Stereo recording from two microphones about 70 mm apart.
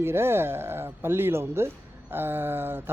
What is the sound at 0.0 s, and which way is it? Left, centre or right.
Speech, right.